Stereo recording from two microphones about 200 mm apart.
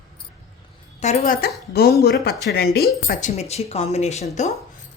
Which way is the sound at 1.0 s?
35° left (ahead or behind).